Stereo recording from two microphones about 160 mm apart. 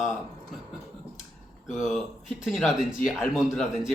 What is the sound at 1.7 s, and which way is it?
Speech, centre (ahead or behind).